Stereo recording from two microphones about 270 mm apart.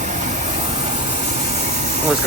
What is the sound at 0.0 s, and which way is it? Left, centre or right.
Vehicle, right.